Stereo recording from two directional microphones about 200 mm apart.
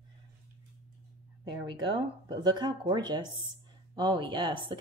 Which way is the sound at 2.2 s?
20° right (ahead or behind).